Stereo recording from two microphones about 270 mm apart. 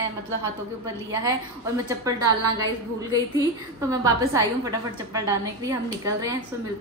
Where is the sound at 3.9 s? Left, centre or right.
Centre.